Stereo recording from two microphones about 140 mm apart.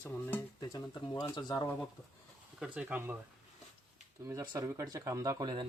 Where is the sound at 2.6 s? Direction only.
5° right (ahead or behind).